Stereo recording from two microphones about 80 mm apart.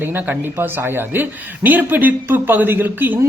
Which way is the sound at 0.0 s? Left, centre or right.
Right.